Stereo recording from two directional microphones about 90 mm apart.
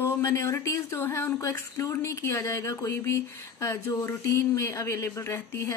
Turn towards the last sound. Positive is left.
turn(degrees=30)  # may be behind; listen again after turning